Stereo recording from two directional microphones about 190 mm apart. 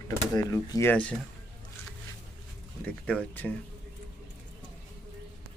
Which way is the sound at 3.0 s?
10° left (ahead or behind).